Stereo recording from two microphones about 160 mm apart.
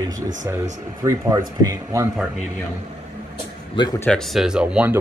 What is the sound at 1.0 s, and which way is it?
Speech, 20° right (ahead or behind).